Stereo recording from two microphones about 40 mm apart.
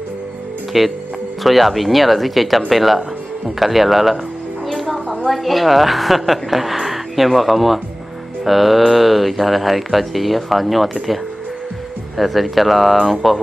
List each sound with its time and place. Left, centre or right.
0.7 s speech: centre
4.6 s music: centre
5.3 s speech: centre
12.2 s speech: centre